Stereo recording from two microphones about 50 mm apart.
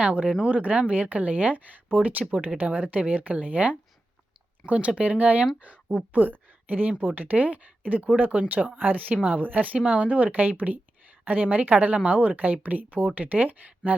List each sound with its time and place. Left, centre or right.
0.0 s a woman's voice: right